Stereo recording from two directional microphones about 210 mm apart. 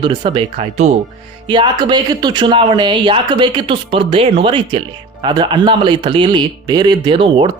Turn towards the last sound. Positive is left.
turn(degrees=-25)  # may be behind; listen again after turning